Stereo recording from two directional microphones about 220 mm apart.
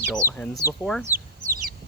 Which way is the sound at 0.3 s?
5° left (ahead or behind).